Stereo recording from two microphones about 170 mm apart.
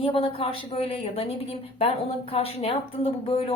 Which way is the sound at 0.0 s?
35° left (ahead or behind).